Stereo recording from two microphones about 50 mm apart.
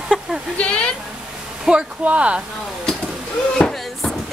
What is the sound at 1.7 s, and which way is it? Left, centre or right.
Speech, right.